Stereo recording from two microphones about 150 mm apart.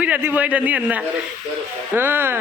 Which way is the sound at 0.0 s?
10° right (ahead or behind).